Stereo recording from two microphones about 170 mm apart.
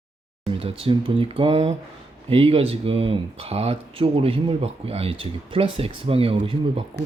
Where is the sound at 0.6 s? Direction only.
30° right (ahead or behind).